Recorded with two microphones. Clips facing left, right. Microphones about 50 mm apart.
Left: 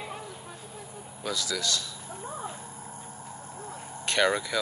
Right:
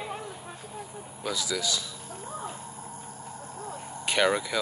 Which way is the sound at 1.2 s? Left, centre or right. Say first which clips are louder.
Right 1 dB; centre.